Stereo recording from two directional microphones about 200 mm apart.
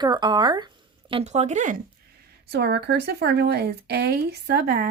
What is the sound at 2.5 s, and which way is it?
Speech, 55° right (ahead or behind).